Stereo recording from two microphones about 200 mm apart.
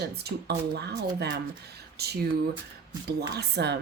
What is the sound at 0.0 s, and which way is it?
Speech, 55° right (ahead or behind).